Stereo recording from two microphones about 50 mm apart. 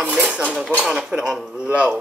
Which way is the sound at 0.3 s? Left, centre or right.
Right.